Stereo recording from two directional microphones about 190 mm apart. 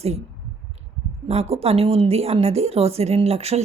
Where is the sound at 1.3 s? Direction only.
35° right (ahead or behind).